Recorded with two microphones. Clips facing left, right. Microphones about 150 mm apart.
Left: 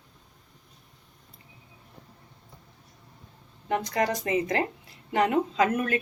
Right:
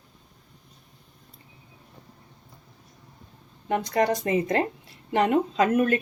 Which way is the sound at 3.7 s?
25° right (ahead or behind).